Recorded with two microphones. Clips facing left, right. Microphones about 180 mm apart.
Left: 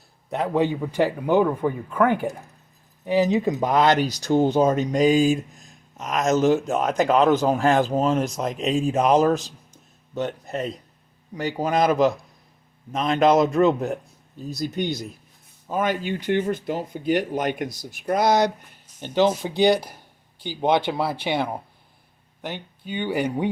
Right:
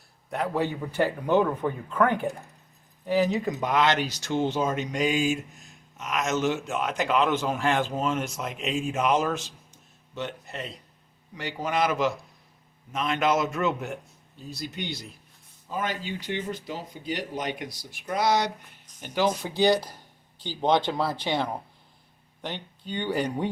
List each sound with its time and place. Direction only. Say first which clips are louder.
0.3 s speech: left 5 dB; 20° left (ahead or behind); by 14.9 s 40° left (ahead or behind)
15.7 s speech: left 7 dB; 55° left (ahead or behind)
18.9 s speech: left 6 dB; 25° left (ahead or behind); by 23.5 s 10° left (ahead or behind)